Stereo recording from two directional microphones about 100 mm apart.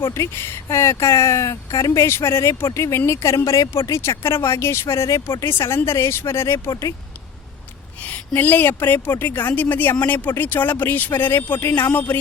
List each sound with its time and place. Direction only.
0.0 s speech: 25° left (ahead or behind)
8.0 s speech: 15° left (ahead or behind)